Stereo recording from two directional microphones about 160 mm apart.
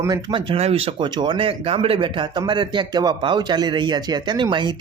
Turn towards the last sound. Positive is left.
turn(degrees=-30)  # may be behind; listen again after turning